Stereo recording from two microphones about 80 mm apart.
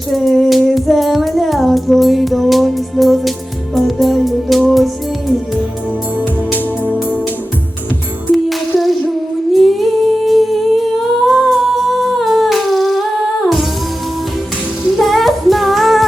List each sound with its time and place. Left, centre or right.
0.1 s music: centre
8.3 s female singing: centre
11.3 s humming: centre
14.9 s female singing: centre